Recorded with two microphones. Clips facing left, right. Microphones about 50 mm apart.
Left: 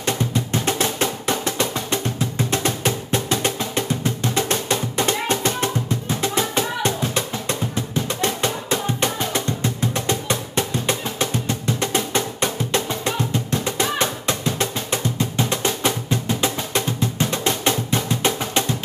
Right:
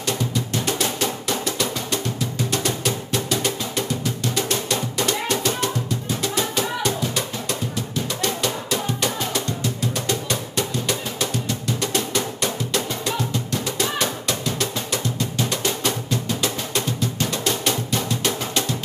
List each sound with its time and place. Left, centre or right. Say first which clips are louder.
0.0 s music: left 2 dB; left